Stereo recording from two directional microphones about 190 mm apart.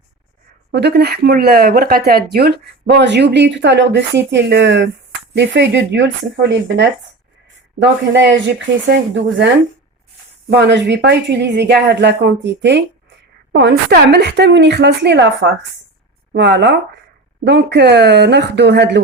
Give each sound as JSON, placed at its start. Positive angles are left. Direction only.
{"t": 0.7, "sound": "speech", "side_deg": -60}
{"t": 10.5, "sound": "speech", "side_deg": -65}